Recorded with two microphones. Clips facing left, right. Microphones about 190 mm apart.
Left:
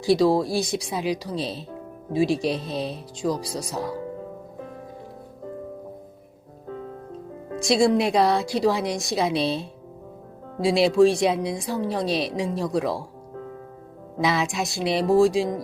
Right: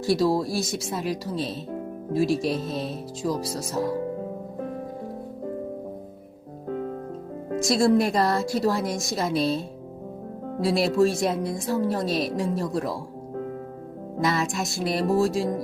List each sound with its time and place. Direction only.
0.0 s speech: centre (ahead or behind)
7.6 s speech: centre (ahead or behind)
10.7 s speech: centre (ahead or behind)
14.3 s speech: centre (ahead or behind)